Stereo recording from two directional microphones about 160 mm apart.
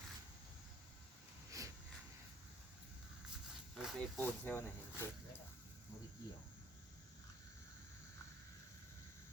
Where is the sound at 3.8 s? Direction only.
5° left (ahead or behind).